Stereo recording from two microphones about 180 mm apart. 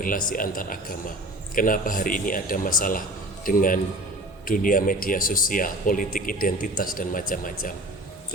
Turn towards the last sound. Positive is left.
turn(degrees=50)  # may be behind; listen again after turning